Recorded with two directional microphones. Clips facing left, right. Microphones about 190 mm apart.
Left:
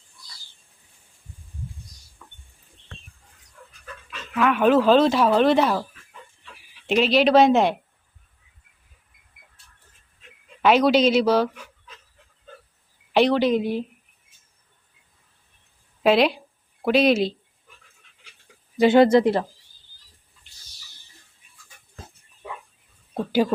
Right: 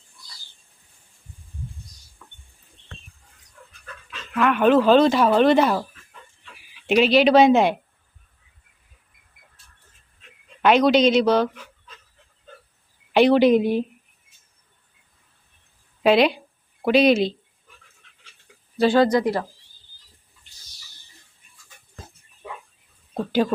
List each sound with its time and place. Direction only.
4.3 s speech: centre (ahead or behind)
6.8 s speech: centre (ahead or behind)
10.6 s speech: 5° left (ahead or behind)
13.3 s speech: 15° right (ahead or behind)
16.0 s speech: centre (ahead or behind)
18.8 s speech: 20° left (ahead or behind)
23.1 s speech: 10° left (ahead or behind)